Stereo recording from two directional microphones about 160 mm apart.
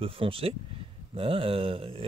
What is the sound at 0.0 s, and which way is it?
Speech, 35° right (ahead or behind).